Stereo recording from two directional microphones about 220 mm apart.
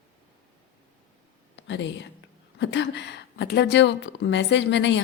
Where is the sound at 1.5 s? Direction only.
55° left (ahead or behind).